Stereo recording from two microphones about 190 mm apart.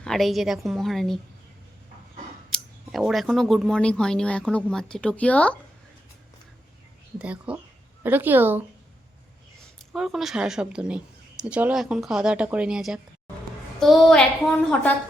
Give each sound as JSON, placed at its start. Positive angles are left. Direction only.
{"t": 0.0, "sound": "speech", "side_deg": 0}
{"t": 2.5, "sound": "speech", "side_deg": 0}
{"t": 7.2, "sound": "a woman's voice", "side_deg": -5}
{"t": 9.9, "sound": "speech", "side_deg": 0}